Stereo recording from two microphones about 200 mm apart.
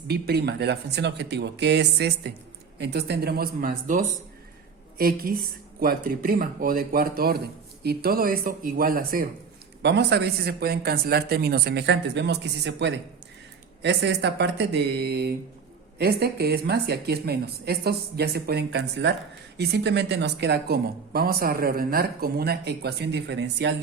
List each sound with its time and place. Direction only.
0.1 s speech: 55° right (ahead or behind)
9.8 s speech: 55° right (ahead or behind)